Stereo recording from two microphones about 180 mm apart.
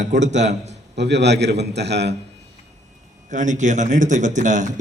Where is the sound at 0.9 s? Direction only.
70° right (ahead or behind).